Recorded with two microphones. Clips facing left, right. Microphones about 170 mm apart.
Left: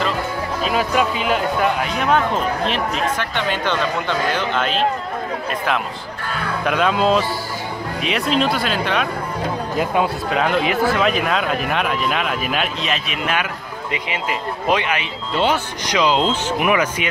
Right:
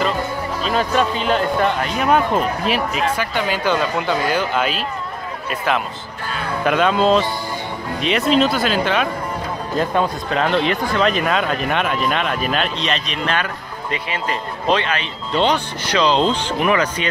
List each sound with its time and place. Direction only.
0.7 s speech: 5° left (ahead or behind)
2.0 s speech: 5° right (ahead or behind)
6.6 s speech: centre (ahead or behind)